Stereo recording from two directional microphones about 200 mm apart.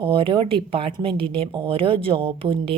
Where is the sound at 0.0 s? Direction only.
25° right (ahead or behind).